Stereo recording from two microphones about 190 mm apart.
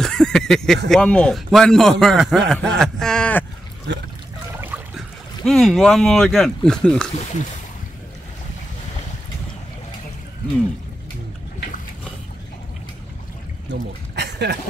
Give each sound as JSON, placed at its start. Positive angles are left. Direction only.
{"t": 0.0, "sound": "a sound", "side_deg": 5}
{"t": 0.8, "sound": "speech", "side_deg": 5}
{"t": 3.9, "sound": "trickle", "side_deg": -65}
{"t": 4.6, "sound": "trickle", "side_deg": -10}
{"t": 5.4, "sound": "speech", "side_deg": 0}
{"t": 13.7, "sound": "a sound", "side_deg": -65}